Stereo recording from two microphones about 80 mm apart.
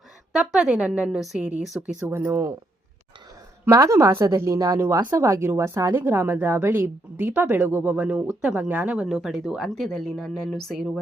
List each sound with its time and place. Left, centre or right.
0.3 s a woman's voice: centre
1.6 s speech: centre
2.0 s speech: right
3.7 s a woman's voice: right; by 9.0 s centre
9.0 s speech: centre